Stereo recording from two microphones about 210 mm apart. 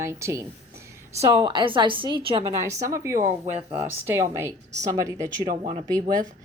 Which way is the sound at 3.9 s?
10° right (ahead or behind).